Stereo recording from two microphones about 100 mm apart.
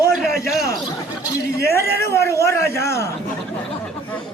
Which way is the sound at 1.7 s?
25° left (ahead or behind).